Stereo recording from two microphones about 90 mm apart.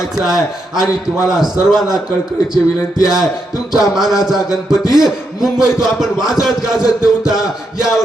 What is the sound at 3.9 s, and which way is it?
A man's voice, 5° right (ahead or behind).